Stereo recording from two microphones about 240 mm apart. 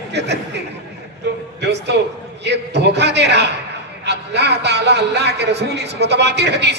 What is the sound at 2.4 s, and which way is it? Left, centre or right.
A man's voice, right.